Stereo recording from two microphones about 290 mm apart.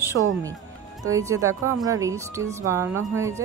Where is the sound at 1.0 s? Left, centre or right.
Centre.